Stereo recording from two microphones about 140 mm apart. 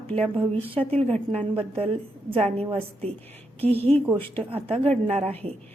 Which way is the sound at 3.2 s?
15° left (ahead or behind).